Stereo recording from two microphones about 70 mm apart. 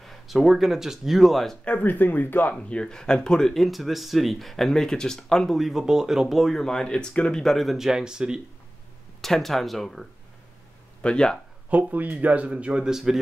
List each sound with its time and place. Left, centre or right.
0.0 s speech: centre
1.6 s speech: left
2.5 s speech: centre
9.2 s speech: centre
11.0 s speech: centre
11.7 s speech: right; by 13.2 s centre